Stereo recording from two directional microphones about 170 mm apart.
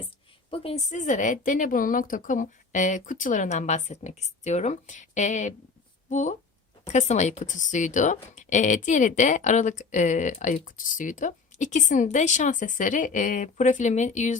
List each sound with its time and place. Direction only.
0.5 s speech: 35° left (ahead or behind)